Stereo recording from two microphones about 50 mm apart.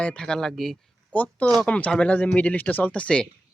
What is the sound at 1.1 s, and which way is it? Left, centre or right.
Speech, left.